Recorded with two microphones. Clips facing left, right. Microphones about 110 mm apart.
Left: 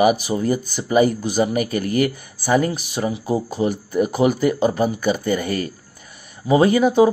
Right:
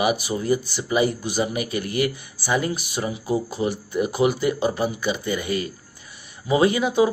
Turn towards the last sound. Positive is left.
turn(degrees=40)  # may be behind; listen again after turning